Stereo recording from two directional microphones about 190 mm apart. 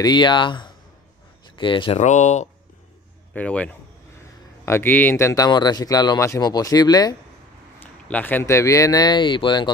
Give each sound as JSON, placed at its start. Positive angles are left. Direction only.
{"t": 0.0, "sound": "speech", "side_deg": 25}
{"t": 3.3, "sound": "speech", "side_deg": 5}
{"t": 7.8, "sound": "speech", "side_deg": 10}